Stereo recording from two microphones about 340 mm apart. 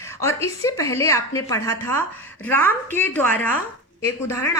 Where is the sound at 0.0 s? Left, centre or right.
Centre.